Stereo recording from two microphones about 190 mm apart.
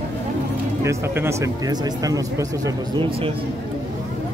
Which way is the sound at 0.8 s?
15° right (ahead or behind).